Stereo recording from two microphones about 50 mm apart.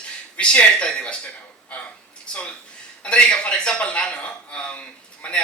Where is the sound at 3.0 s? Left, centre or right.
Left.